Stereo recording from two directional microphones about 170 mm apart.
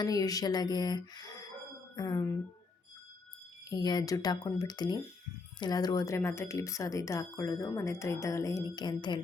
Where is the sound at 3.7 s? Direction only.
25° left (ahead or behind).